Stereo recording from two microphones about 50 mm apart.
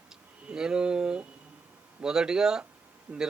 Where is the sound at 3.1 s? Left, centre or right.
Right.